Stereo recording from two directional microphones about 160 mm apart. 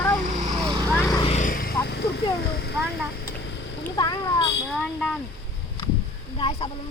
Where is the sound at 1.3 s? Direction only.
45° left (ahead or behind).